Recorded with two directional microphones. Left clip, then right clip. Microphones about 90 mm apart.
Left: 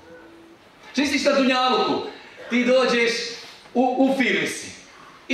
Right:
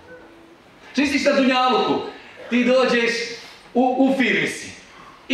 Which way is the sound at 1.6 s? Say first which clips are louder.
Right 2 dB; 20° left (ahead or behind).